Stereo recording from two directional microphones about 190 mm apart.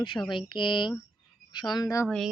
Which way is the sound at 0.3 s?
25° left (ahead or behind).